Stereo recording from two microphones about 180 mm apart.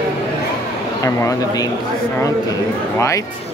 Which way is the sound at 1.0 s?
20° left (ahead or behind).